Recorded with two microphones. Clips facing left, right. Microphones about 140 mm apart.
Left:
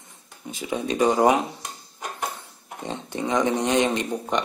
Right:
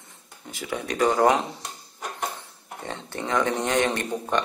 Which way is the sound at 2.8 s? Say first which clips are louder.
Left 3 dB; 15° left (ahead or behind).